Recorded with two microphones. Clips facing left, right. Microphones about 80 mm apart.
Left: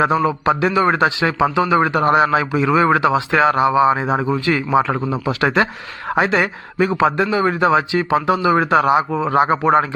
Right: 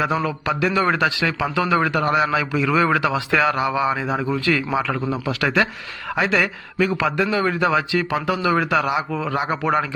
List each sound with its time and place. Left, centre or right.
0.0 s a man's voice: left